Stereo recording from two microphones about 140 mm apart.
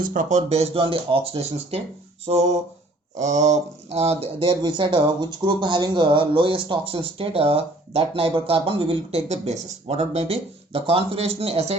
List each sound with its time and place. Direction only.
0.0 s speech: 70° right (ahead or behind); by 11.8 s 45° right (ahead or behind)